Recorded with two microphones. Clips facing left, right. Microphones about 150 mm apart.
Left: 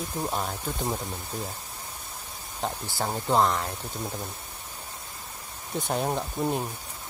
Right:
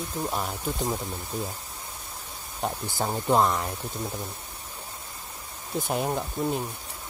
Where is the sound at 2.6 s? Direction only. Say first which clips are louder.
Right 1 dB; 15° right (ahead or behind).